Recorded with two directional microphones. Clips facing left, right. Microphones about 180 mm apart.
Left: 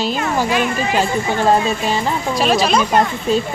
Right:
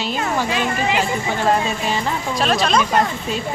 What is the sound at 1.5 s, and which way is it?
Music, 30° left (ahead or behind).